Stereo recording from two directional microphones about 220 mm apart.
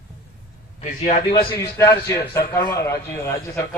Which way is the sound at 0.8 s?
35° left (ahead or behind).